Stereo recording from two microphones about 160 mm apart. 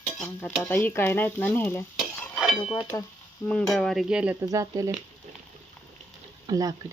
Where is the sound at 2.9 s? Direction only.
25° left (ahead or behind).